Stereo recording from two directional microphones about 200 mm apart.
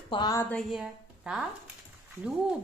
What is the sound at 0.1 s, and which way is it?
Speech, 20° left (ahead or behind).